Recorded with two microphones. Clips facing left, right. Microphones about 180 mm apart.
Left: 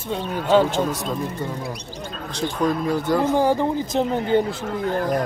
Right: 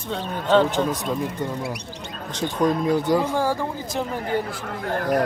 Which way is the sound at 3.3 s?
20° left (ahead or behind).